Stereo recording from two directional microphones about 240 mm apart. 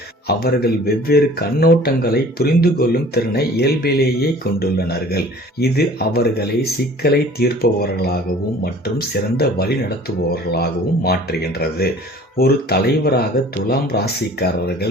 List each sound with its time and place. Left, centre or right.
0.3 s speech: left